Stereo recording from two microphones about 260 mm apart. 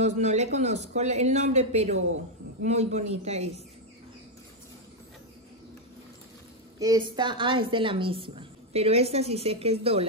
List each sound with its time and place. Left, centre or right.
0.0 s a woman's voice: right
6.8 s a woman's voice: centre